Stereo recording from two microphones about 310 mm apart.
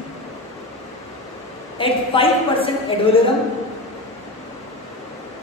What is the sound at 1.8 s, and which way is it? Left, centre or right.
A woman's voice, centre.